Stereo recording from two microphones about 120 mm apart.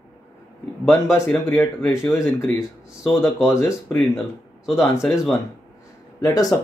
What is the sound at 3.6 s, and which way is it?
Speech, 20° left (ahead or behind).